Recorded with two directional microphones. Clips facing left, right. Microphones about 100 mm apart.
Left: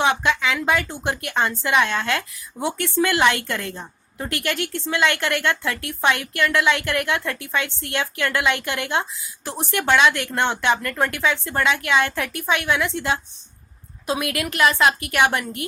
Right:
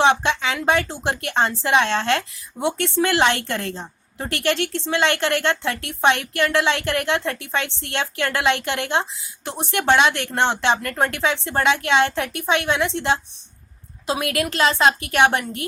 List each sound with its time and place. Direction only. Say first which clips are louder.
0.0 s speech: right 2 dB; 25° right (ahead or behind)